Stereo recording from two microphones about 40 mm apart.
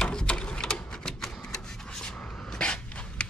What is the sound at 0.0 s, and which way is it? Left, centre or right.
Typewriter, left.